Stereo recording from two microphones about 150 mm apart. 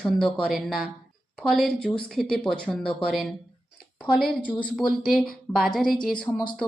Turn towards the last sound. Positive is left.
turn(degrees=5)  # may be behind; listen again after turning